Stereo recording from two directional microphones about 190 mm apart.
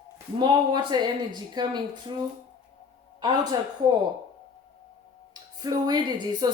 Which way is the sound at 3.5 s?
20° right (ahead or behind).